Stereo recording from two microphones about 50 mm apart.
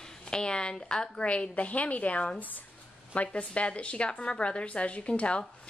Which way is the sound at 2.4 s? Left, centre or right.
Left.